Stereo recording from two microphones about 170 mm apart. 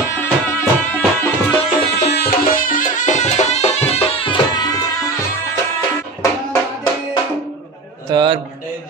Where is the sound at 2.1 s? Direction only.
65° left (ahead or behind); by 4.7 s 25° left (ahead or behind).